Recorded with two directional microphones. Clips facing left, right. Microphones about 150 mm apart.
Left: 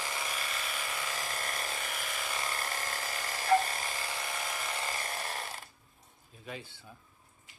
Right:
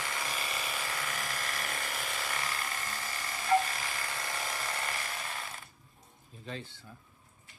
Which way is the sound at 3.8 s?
15° left (ahead or behind).